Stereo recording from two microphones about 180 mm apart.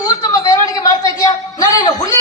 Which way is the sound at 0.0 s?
20° left (ahead or behind).